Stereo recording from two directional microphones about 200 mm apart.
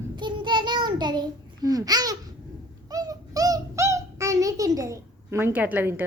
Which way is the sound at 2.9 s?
20° right (ahead or behind).